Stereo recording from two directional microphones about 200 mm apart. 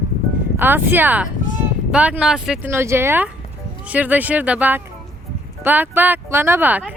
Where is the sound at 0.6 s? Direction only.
10° right (ahead or behind).